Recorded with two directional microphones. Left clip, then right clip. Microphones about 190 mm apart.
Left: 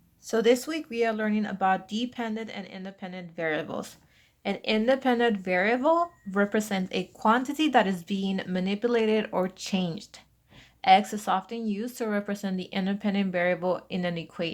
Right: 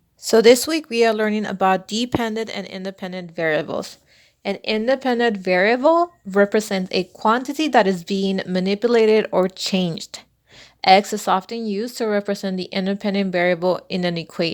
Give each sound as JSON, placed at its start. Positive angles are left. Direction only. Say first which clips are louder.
{"t": 0.3, "sound": "speech", "louder": "right 11 dB", "side_deg": -40}